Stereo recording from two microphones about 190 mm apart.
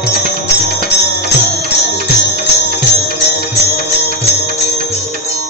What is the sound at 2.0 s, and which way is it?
Music, 50° right (ahead or behind).